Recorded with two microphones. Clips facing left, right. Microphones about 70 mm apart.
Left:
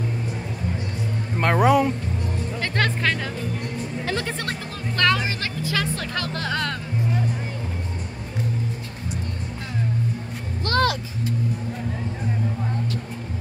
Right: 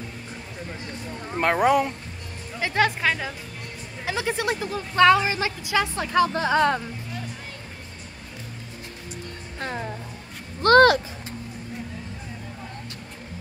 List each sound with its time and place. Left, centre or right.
1.4 s speech: centre
10.6 s speech: right